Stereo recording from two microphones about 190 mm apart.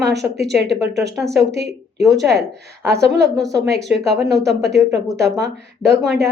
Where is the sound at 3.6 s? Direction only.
65° right (ahead or behind).